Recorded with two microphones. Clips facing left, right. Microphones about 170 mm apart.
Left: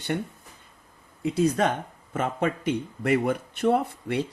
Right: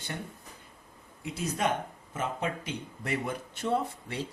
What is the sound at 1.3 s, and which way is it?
Speech, 65° left (ahead or behind).